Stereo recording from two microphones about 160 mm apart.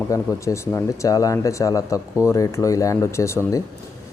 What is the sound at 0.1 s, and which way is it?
Speech, 20° left (ahead or behind).